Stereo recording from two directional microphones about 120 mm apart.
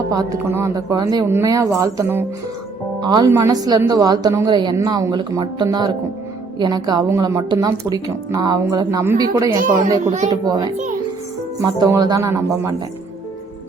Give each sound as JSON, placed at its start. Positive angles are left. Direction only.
{"t": 0.1, "sound": "speech", "side_deg": -30}
{"t": 3.0, "sound": "a woman's voice", "side_deg": -35}
{"t": 3.2, "sound": "speech", "side_deg": -25}
{"t": 10.1, "sound": "a woman's voice", "side_deg": -75}
{"t": 10.4, "sound": "speech", "side_deg": -35}
{"t": 11.9, "sound": "speech", "side_deg": -30}